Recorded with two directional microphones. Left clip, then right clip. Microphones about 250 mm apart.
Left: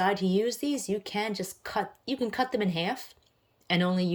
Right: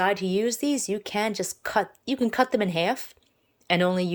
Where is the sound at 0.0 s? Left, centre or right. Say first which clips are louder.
Right 3 dB; centre.